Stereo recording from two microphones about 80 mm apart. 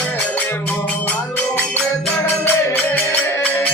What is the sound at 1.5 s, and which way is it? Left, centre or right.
Music, centre.